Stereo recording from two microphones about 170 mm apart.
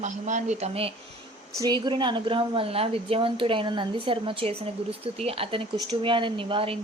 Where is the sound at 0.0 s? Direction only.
45° right (ahead or behind).